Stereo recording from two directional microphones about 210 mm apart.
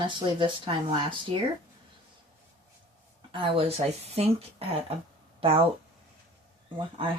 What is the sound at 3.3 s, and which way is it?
Speech, 25° right (ahead or behind).